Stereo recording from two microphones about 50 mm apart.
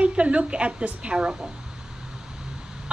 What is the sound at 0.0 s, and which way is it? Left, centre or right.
Female singing, right.